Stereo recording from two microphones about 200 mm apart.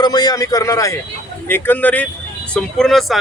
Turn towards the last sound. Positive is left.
turn(degrees=0)  # may be behind; listen again after turning